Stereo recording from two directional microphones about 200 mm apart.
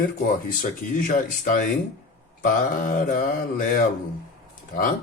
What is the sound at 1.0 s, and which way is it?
Speech, 40° left (ahead or behind).